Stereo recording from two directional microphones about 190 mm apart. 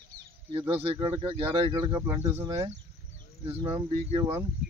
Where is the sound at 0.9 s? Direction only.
30° right (ahead or behind).